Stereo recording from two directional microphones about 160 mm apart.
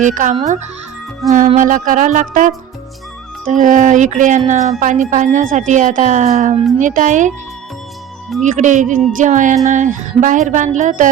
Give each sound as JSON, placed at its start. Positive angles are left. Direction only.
{"t": 0.0, "sound": "speech", "side_deg": -55}
{"t": 8.4, "sound": "speech", "side_deg": -50}